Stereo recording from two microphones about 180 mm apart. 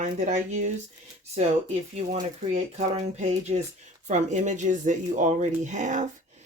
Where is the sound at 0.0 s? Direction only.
40° right (ahead or behind).